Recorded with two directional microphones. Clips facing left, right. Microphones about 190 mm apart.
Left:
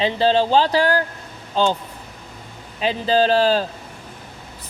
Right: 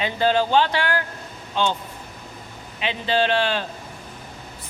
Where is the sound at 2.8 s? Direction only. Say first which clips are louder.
Left 4 dB; 35° left (ahead or behind).